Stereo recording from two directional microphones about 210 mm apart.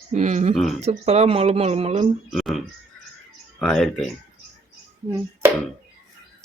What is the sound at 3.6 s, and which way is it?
Speech, centre (ahead or behind).